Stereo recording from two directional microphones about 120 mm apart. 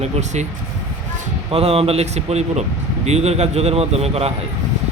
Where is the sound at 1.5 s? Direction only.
55° right (ahead or behind).